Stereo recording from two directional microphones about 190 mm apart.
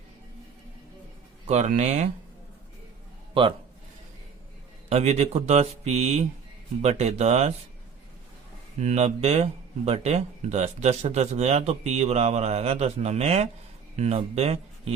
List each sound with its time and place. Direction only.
1.5 s speech: 40° right (ahead or behind)
3.3 s a man's voice: 25° right (ahead or behind)
4.9 s speech: 35° right (ahead or behind)
8.8 s speech: 35° right (ahead or behind)